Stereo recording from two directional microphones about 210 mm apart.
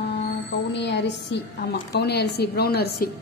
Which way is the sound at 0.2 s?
55° left (ahead or behind).